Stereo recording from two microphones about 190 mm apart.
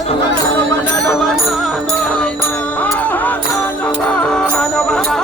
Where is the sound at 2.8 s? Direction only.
10° left (ahead or behind).